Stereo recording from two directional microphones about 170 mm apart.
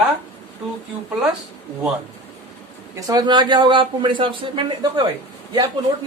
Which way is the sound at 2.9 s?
20° right (ahead or behind).